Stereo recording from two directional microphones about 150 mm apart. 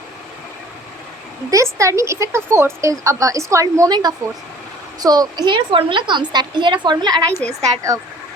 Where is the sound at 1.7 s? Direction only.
20° right (ahead or behind).